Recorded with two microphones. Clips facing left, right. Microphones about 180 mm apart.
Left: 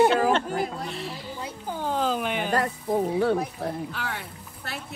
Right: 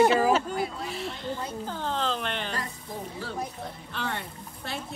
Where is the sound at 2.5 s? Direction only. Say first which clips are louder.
Left 11 dB; 70° left (ahead or behind).